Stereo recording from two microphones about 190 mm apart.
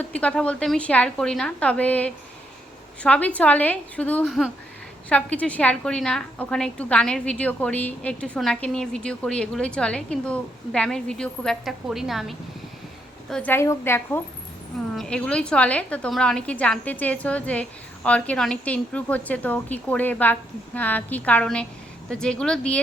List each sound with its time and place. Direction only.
0.0 s a woman's voice: 5° left (ahead or behind)
13.3 s a woman's voice: 10° left (ahead or behind)